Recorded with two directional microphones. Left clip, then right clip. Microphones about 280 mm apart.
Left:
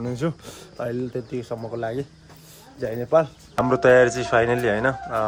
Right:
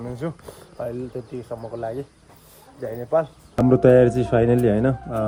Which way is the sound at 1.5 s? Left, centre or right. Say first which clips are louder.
Left 1 dB; left.